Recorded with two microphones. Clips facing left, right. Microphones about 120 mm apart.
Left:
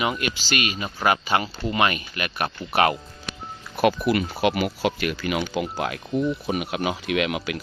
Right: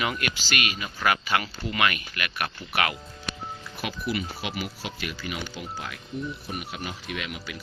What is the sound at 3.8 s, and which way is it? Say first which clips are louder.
Speech: left 10 dB; 65° left (ahead or behind).